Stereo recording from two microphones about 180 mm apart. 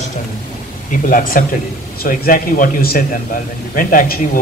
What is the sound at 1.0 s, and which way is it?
A man's voice, 50° left (ahead or behind).